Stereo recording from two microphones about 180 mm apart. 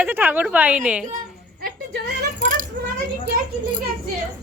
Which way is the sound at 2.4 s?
50° right (ahead or behind).